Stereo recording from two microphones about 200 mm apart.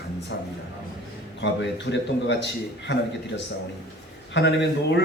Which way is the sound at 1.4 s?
60° left (ahead or behind).